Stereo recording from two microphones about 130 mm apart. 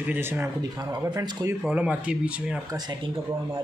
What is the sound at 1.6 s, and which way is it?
Speech, 10° right (ahead or behind).